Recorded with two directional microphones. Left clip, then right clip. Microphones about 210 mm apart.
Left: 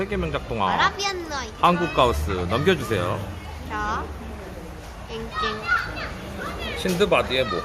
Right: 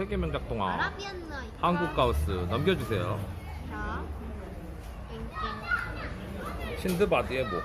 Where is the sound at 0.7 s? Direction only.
35° left (ahead or behind).